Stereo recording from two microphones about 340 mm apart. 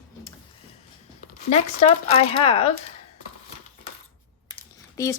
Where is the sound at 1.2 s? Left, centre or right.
Centre.